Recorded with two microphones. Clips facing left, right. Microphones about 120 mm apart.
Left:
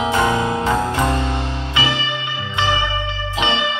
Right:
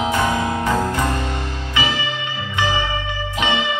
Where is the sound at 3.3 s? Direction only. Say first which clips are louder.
Left 1 dB; 25° left (ahead or behind).